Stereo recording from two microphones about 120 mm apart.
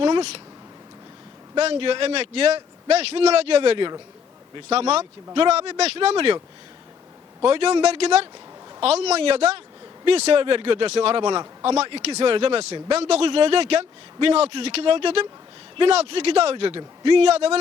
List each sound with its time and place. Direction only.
0.0 s speech: 45° right (ahead or behind)
1.5 s a man's voice: 50° right (ahead or behind)
4.7 s a man's voice: 60° right (ahead or behind)
7.4 s a man's voice: 50° right (ahead or behind)